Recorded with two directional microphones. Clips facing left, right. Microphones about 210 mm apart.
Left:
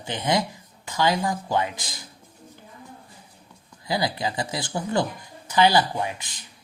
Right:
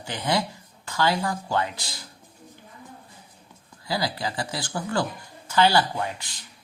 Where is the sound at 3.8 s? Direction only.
20° left (ahead or behind).